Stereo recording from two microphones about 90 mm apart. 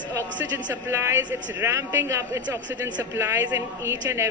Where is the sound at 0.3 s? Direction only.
20° right (ahead or behind).